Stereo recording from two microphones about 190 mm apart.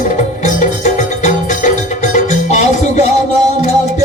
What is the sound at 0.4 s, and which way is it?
Music, 40° left (ahead or behind).